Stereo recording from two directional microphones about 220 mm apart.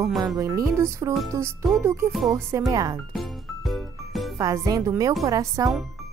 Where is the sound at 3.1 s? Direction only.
Centre (ahead or behind).